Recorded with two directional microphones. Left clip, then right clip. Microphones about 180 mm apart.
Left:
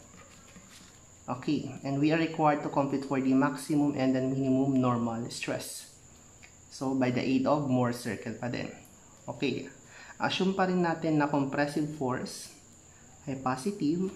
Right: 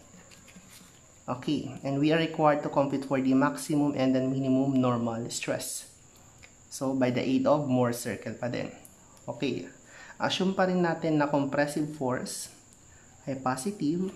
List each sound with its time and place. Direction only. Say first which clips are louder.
1.2 s speech: right 1 dB; 15° right (ahead or behind)
6.8 s speech: right 2 dB; 15° right (ahead or behind)